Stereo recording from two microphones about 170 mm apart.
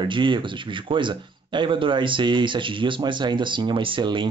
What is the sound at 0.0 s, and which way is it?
Speech, 30° right (ahead or behind).